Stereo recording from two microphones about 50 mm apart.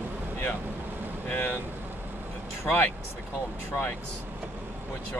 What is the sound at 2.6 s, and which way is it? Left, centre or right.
Speech, left.